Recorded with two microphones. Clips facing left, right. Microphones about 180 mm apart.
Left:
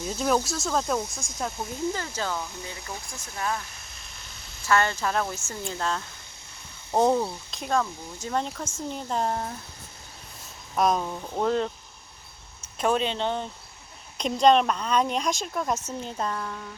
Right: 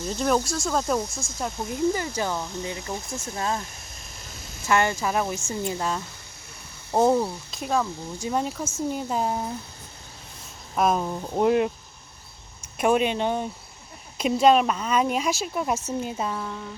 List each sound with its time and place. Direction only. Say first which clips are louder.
0.0 s speech: right 1 dB; 5° left (ahead or behind)
2.0 s speech: right 3 dB; 15° right (ahead or behind)
4.6 s speech: right 1 dB; 15° right (ahead or behind)
6.9 s speech: right 2 dB; centre (ahead or behind)
10.8 s speech: right 1 dB; 5° right (ahead or behind)
12.8 s speech: right 3 dB; 15° right (ahead or behind)